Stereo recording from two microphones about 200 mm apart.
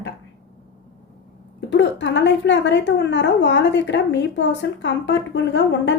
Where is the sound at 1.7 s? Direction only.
65° left (ahead or behind).